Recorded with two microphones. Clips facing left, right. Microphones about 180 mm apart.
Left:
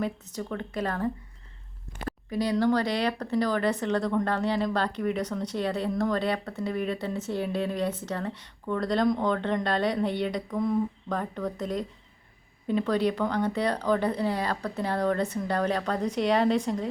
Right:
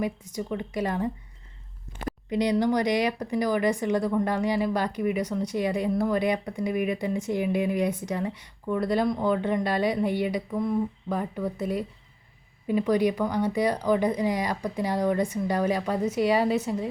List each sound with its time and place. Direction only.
0.0 s speech: 10° right (ahead or behind)
2.3 s speech: 20° right (ahead or behind)